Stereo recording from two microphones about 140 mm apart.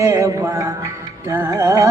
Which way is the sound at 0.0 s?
25° right (ahead or behind).